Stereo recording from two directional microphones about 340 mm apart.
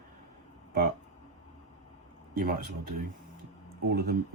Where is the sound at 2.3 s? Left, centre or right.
Right.